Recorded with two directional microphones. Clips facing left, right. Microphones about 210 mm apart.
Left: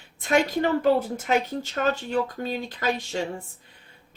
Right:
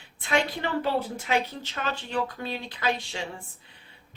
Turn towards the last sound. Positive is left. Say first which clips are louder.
# left 3 dB
turn(degrees=45)  # may be behind; listen again after turning